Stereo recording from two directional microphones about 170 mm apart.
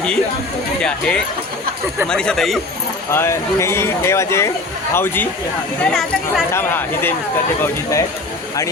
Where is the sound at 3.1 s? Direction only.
15° left (ahead or behind).